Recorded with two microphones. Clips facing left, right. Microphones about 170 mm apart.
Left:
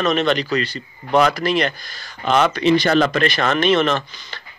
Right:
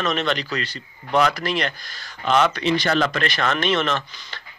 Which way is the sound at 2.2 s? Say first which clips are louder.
Left 2 dB; 50° left (ahead or behind).